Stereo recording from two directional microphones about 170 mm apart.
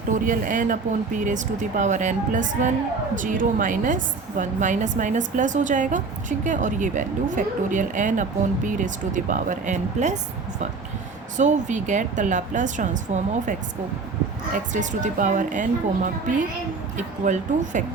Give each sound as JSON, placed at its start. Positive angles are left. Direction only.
{"t": 0.1, "sound": "a woman's voice", "side_deg": -50}
{"t": 11.3, "sound": "a woman's voice", "side_deg": -45}
{"t": 14.7, "sound": "a woman's voice", "side_deg": -45}
{"t": 17.0, "sound": "a woman's voice", "side_deg": -45}